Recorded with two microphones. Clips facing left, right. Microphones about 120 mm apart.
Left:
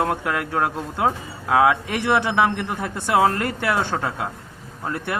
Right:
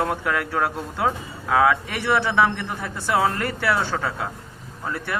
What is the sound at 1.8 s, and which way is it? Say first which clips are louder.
Speech: left 2 dB; 5° left (ahead or behind).